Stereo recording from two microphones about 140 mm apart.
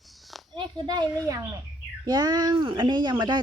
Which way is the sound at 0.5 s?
30° right (ahead or behind).